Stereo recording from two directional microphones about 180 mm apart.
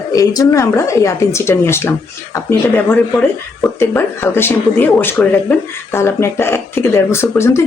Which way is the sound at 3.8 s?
15° left (ahead or behind).